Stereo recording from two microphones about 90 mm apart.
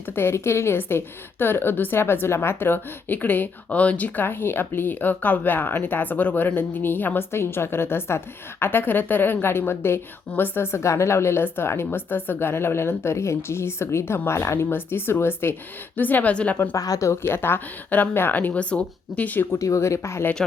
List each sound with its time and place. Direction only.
0.2 s a woman's voice: 30° left (ahead or behind)
16.7 s speech: 40° left (ahead or behind)
17.1 s a woman's voice: 30° left (ahead or behind)
19.5 s speech: 35° left (ahead or behind)